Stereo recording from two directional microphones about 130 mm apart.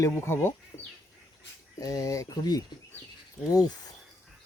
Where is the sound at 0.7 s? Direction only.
30° left (ahead or behind).